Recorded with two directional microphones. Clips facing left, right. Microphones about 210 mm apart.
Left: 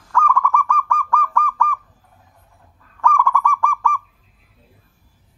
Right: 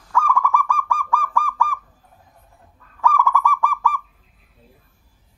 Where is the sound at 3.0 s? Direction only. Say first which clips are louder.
Even; 5° right (ahead or behind).